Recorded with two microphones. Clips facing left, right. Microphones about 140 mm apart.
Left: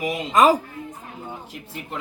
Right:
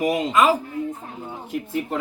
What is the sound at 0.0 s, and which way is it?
Speech, 45° right (ahead or behind).